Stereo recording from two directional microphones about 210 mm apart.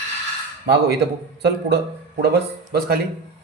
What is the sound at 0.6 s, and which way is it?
Speech, 50° right (ahead or behind).